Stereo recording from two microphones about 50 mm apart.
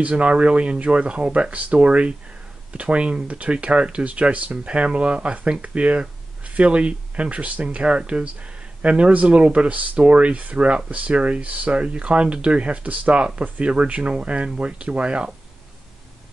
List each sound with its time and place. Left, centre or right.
0.1 s speech: right